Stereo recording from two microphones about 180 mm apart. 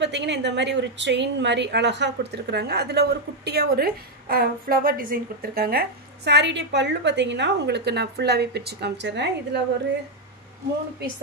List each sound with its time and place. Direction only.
0.0 s a woman's voice: 75° right (ahead or behind)